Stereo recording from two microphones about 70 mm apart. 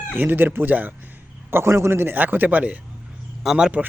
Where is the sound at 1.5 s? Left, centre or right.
Right; by 3.8 s centre.